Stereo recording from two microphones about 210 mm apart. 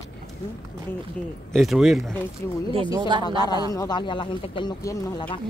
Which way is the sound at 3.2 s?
20° left (ahead or behind).